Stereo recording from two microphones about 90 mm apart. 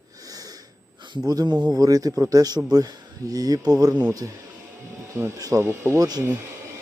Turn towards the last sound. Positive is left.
turn(degrees=-45)  # may be behind; listen again after turning